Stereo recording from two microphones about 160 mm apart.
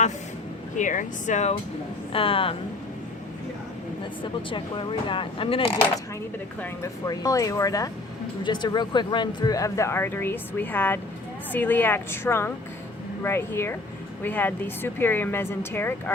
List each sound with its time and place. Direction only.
0.8 s speech: 50° left (ahead or behind)
2.1 s speech: 35° left (ahead or behind)
4.2 s speech: 30° left (ahead or behind)
6.6 s speech: 20° left (ahead or behind)